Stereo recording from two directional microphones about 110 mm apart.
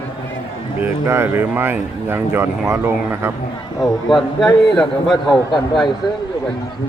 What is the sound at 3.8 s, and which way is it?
Speech, 40° left (ahead or behind).